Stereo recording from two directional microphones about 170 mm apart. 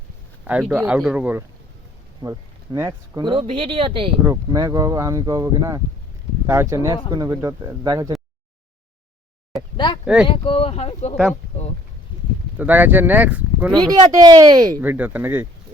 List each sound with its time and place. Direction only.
0.4 s speech: 10° right (ahead or behind)
3.2 s speech: 30° right (ahead or behind)
4.3 s speech: 20° right (ahead or behind)
9.7 s a sound: 25° left (ahead or behind)
10.2 s speech: 30° left (ahead or behind)
12.5 s speech: 10° right (ahead or behind)
13.7 s speech: 25° right (ahead or behind)
14.8 s speech: 10° right (ahead or behind)